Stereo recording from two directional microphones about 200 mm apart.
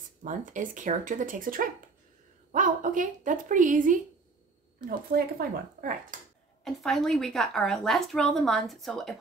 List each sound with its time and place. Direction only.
0.2 s speech: 40° right (ahead or behind)
6.6 s a woman's voice: centre (ahead or behind)